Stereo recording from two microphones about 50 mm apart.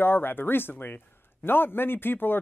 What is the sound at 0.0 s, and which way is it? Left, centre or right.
Speech, left.